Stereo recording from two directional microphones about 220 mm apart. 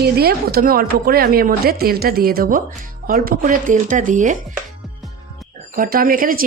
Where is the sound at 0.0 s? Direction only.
45° right (ahead or behind).